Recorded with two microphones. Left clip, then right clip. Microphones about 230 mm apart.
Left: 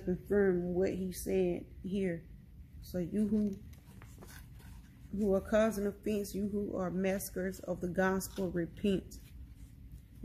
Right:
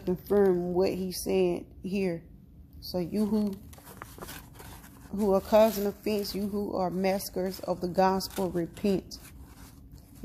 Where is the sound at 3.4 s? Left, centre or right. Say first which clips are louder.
Right 4 dB; right.